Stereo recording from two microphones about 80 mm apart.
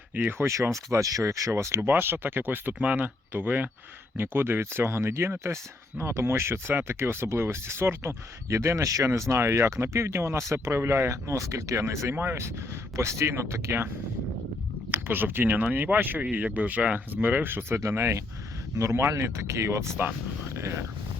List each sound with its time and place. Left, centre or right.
0.2 s speech: right
0.4 s speech: right
1.9 s speech: right
14.9 s speech: right